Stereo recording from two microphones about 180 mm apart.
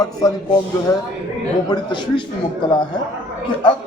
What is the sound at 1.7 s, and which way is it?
Speech, 25° left (ahead or behind).